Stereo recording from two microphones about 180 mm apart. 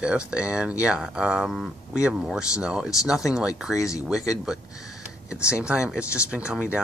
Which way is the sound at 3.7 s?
15° left (ahead or behind).